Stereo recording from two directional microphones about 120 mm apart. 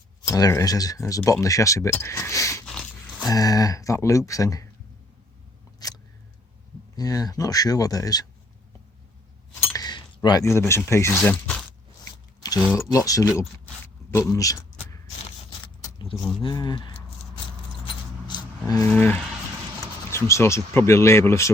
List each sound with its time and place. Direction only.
0.3 s speech: 30° left (ahead or behind)
5.8 s a sound: 30° left (ahead or behind)
6.9 s speech: 30° left (ahead or behind)
9.7 s a sound: 30° left (ahead or behind)
10.4 s speech: 20° left (ahead or behind)
12.7 s speech: 25° left (ahead or behind)
13.8 s a sound: 20° left (ahead or behind)
14.3 s speech: 30° left (ahead or behind)
15.6 s vehicle: 35° left (ahead or behind)
16.0 s speech: 45° left (ahead or behind)
18.3 s vehicle: 40° left (ahead or behind)
18.8 s speech: 15° left (ahead or behind)